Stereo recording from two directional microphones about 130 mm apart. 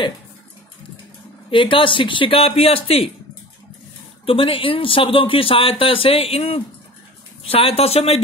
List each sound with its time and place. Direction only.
1.5 s speech: 40° left (ahead or behind)
4.3 s speech: 45° left (ahead or behind)